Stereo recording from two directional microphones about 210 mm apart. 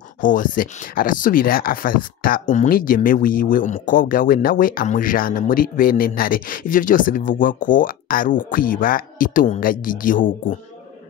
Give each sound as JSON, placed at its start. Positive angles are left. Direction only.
{"t": 0.2, "sound": "speech", "side_deg": 40}